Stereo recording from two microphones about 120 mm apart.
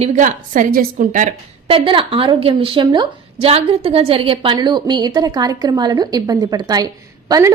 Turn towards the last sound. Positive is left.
turn(degrees=-30)  # may be behind; listen again after turning